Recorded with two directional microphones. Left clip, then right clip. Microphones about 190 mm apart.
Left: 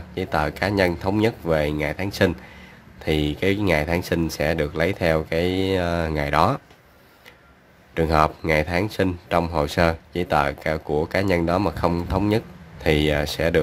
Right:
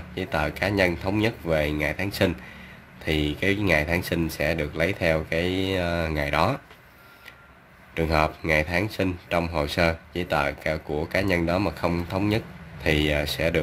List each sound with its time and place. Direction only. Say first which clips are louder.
0.1 s speech: left 3 dB; 15° left (ahead or behind)
7.9 s speech: left 4 dB; 20° left (ahead or behind)